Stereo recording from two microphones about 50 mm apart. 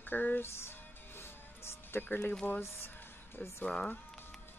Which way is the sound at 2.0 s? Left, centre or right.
Left.